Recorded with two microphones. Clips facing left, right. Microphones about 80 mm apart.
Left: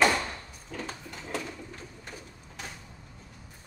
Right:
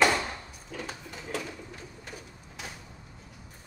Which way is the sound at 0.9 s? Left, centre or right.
Centre.